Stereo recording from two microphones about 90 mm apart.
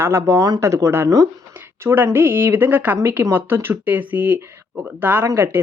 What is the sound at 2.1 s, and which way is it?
Speech, 25° right (ahead or behind).